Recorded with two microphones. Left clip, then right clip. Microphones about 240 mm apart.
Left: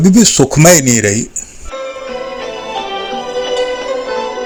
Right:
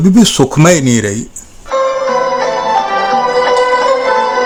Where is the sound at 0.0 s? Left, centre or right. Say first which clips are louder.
Even; centre.